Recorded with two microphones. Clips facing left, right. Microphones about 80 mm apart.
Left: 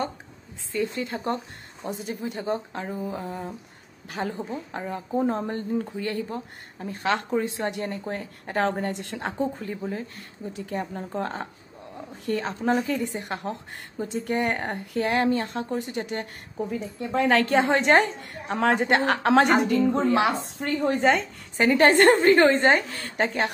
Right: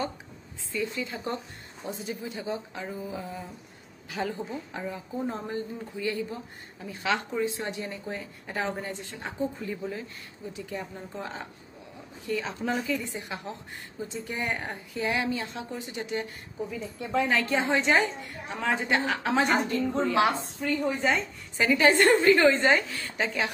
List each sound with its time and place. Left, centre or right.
0.7 s a woman's voice: left
2.8 s speech: left
5.5 s a woman's voice: left
8.8 s speech: left
9.6 s a woman's voice: left
17.2 s a woman's voice: left
20.5 s speech: left
21.5 s a woman's voice: left